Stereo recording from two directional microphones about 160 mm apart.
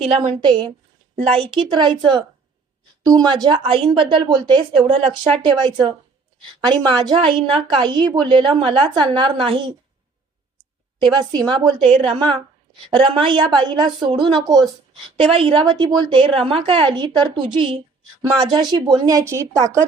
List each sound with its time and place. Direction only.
0.0 s a woman's voice: 35° right (ahead or behind)
11.0 s a woman's voice: 30° right (ahead or behind)